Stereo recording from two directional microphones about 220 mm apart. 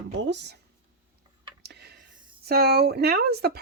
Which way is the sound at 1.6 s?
50° right (ahead or behind).